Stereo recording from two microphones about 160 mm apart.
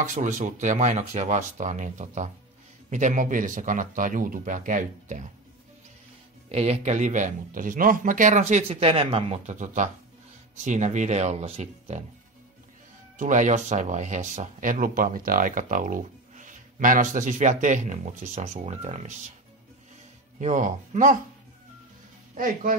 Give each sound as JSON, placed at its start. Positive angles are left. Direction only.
{"t": 0.0, "sound": "speech", "side_deg": -50}
{"t": 6.5, "sound": "speech", "side_deg": -45}
{"t": 13.2, "sound": "speech", "side_deg": -50}
{"t": 20.3, "sound": "speech", "side_deg": -50}
{"t": 22.3, "sound": "speech", "side_deg": -60}